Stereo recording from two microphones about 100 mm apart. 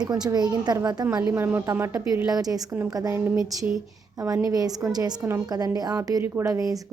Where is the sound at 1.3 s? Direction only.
20° right (ahead or behind).